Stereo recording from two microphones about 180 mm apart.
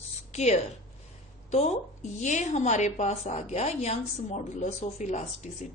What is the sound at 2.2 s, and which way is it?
A woman's voice, 40° left (ahead or behind).